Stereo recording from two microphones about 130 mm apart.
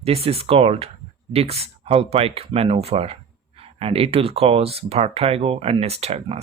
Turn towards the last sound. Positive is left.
turn(degrees=-55)  # may be behind; listen again after turning